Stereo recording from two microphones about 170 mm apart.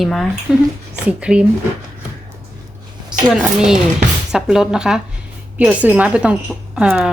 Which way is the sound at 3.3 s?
5° right (ahead or behind).